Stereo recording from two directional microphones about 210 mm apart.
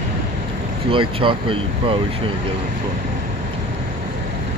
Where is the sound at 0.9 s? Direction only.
25° right (ahead or behind).